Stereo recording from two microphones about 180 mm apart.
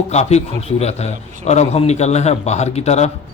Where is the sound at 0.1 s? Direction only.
40° left (ahead or behind).